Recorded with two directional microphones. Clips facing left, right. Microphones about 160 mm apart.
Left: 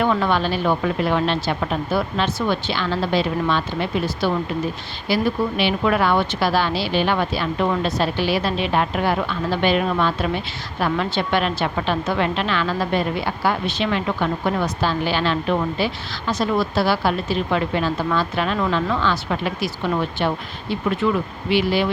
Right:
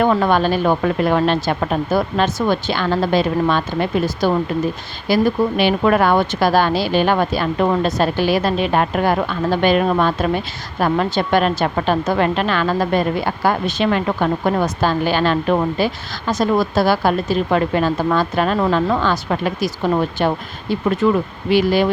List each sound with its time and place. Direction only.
0.0 s speech: 45° right (ahead or behind)